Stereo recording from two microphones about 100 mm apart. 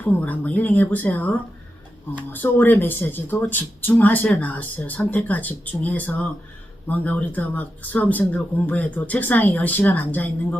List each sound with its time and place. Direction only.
0.0 s speech: 15° left (ahead or behind)